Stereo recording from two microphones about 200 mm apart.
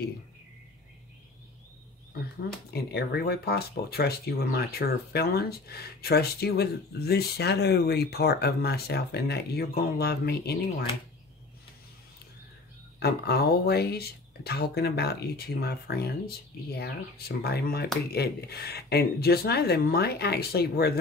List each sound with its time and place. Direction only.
2.7 s speech: 55° left (ahead or behind)
13.0 s speech: 50° left (ahead or behind)